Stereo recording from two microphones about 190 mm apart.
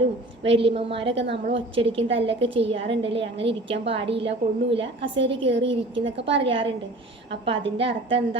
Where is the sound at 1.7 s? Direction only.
30° right (ahead or behind).